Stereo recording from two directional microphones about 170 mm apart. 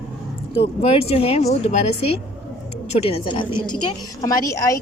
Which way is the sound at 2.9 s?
35° left (ahead or behind).